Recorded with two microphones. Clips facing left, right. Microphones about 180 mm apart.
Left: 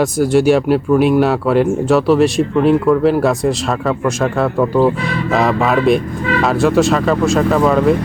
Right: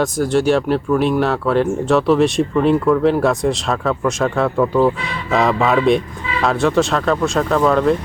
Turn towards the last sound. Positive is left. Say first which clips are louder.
# left 2 dB
turn(degrees=5)  # may be behind; listen again after turning